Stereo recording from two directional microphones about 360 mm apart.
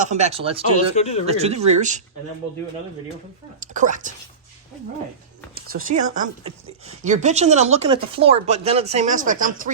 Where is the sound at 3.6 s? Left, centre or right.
Right.